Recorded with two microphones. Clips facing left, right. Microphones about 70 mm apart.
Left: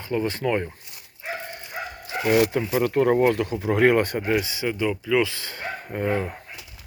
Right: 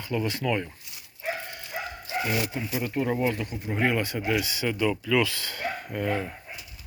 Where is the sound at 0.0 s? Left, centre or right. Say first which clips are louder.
Left 3 dB; left.